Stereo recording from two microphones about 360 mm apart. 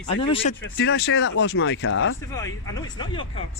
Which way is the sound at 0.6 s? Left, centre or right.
Left.